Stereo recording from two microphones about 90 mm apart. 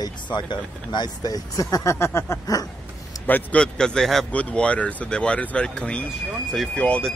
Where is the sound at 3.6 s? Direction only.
10° left (ahead or behind).